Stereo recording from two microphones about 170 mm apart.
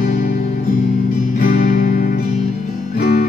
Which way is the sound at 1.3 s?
55° left (ahead or behind).